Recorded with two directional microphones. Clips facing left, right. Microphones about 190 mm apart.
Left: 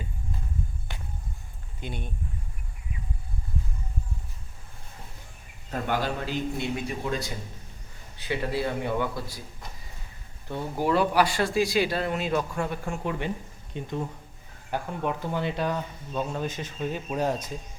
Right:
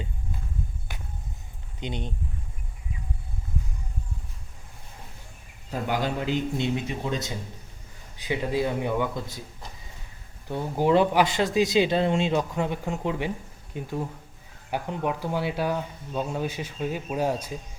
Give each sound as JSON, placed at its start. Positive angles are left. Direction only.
{"t": 1.8, "sound": "a man's voice", "side_deg": -20}
{"t": 5.7, "sound": "a man's voice", "side_deg": -15}
{"t": 10.5, "sound": "a man's voice", "side_deg": -15}